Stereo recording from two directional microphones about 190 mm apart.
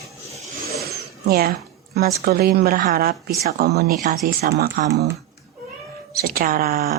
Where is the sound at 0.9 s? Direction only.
55° right (ahead or behind).